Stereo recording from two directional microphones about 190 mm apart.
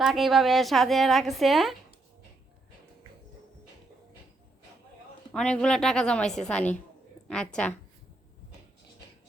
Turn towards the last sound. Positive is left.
turn(degrees=5)  # may be behind; listen again after turning